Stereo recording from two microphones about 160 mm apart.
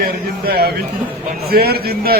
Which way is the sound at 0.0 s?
75° right (ahead or behind).